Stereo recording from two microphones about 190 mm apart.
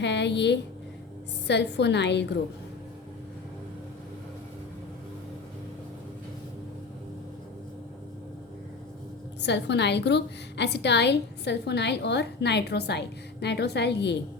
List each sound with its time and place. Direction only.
0.0 s a woman's voice: 65° left (ahead or behind)
9.4 s a woman's voice: 65° left (ahead or behind)